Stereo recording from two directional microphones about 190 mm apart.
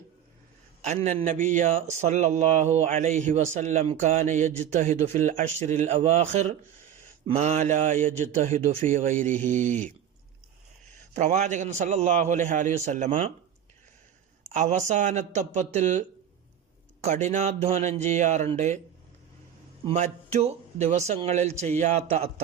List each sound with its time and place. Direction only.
0.9 s a man's voice: 40° right (ahead or behind)
11.1 s a man's voice: 40° right (ahead or behind)
14.5 s a man's voice: 40° right (ahead or behind)
19.8 s a man's voice: 35° right (ahead or behind)